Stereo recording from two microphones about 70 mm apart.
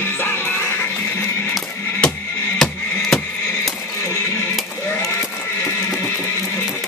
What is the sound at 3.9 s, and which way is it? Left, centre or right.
Neigh, left.